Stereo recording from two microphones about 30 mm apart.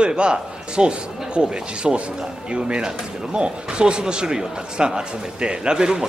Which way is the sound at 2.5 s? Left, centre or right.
Right.